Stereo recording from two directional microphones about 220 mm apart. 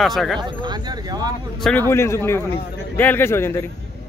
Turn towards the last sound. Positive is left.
turn(degrees=10)  # may be behind; listen again after turning